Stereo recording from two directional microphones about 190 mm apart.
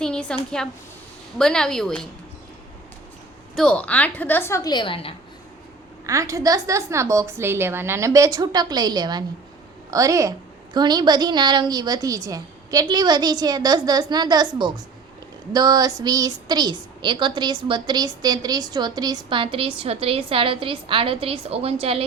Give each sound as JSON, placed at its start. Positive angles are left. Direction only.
{"t": 0.0, "sound": "a sound", "side_deg": 5}
{"t": 0.6, "sound": "a woman's voice", "side_deg": 5}
{"t": 3.5, "sound": "a woman's voice", "side_deg": 5}
{"t": 6.1, "sound": "a woman's voice", "side_deg": -15}